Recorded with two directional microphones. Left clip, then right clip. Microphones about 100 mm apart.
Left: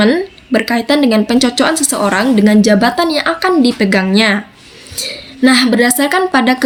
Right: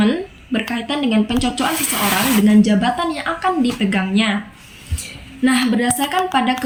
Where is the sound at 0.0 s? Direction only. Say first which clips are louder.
Left 8 dB; 35° left (ahead or behind).